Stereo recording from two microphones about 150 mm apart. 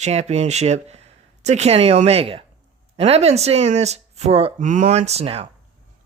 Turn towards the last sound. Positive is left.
turn(degrees=-40)  # may be behind; listen again after turning